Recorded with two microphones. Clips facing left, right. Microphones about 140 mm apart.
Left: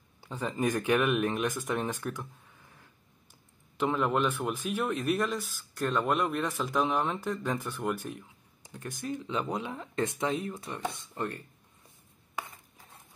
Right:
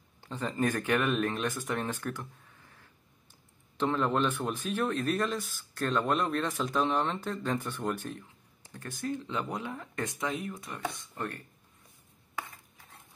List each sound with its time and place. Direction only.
0.2 s a man's voice: 10° left (ahead or behind)
3.7 s a man's voice: 10° left (ahead or behind)